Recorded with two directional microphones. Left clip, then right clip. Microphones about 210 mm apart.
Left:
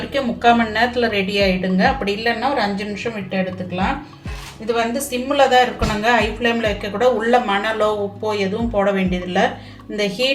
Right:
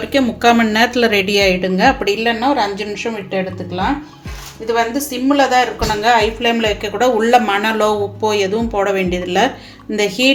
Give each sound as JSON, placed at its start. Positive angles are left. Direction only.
{"t": 0.1, "sound": "a woman's voice", "side_deg": -50}
{"t": 4.6, "sound": "a woman's voice", "side_deg": -35}